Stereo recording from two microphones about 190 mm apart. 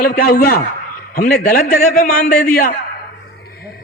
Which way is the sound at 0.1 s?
55° left (ahead or behind).